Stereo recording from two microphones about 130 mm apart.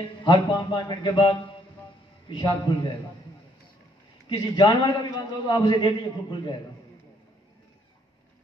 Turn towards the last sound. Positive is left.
turn(degrees=35)  # may be behind; listen again after turning